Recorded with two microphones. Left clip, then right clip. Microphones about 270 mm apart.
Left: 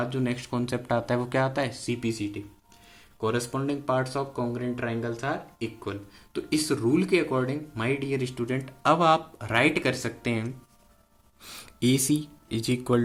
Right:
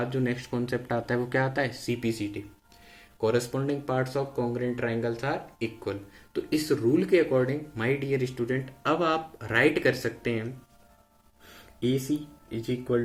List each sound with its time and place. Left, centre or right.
0.0 s speech: centre
12.5 s speech: left